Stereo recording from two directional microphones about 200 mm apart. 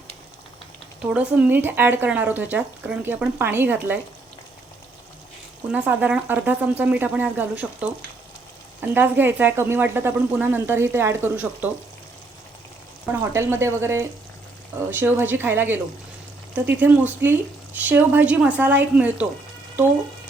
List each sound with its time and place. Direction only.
1.1 s speech: 5° right (ahead or behind)
5.7 s speech: 10° right (ahead or behind)
8.9 s speech: 10° right (ahead or behind)
13.1 s speech: 10° right (ahead or behind)
16.8 s speech: 10° right (ahead or behind)